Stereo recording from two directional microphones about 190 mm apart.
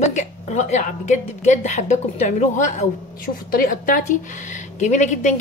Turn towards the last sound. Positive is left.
turn(degrees=40)  # may be behind; listen again after turning